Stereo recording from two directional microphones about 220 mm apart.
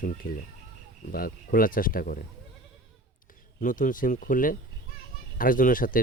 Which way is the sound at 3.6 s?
35° left (ahead or behind).